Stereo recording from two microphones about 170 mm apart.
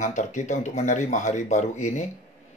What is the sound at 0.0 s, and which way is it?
Speech, 45° left (ahead or behind).